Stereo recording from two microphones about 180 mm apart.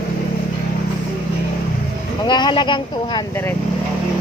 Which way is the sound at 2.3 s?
25° left (ahead or behind).